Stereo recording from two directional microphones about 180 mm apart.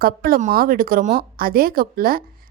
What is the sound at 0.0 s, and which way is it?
A woman's voice, 55° right (ahead or behind).